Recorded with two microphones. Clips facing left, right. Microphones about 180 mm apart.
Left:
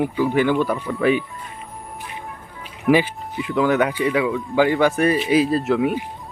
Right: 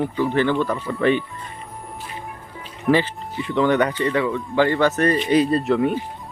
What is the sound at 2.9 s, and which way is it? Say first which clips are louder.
Speech: left 2 dB; 10° left (ahead or behind).